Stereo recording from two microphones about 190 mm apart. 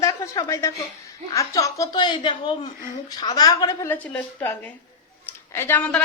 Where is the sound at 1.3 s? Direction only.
15° left (ahead or behind).